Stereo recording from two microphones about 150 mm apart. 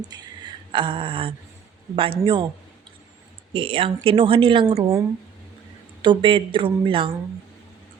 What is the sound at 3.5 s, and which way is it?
Speech, 40° right (ahead or behind).